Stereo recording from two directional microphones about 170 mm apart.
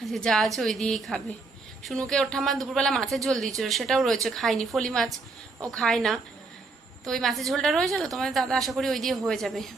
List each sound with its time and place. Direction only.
0.0 s a woman's voice: centre (ahead or behind)